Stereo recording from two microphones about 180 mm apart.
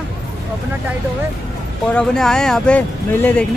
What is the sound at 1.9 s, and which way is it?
Speech, 5° left (ahead or behind).